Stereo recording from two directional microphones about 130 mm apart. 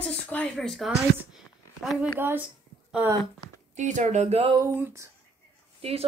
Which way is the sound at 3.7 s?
70° right (ahead or behind).